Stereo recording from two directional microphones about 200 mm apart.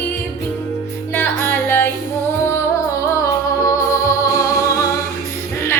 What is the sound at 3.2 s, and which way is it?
Music, 15° left (ahead or behind).